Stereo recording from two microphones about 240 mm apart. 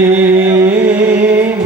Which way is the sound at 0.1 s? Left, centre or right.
Centre.